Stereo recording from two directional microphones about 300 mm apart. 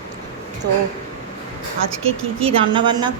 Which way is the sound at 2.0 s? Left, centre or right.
Centre.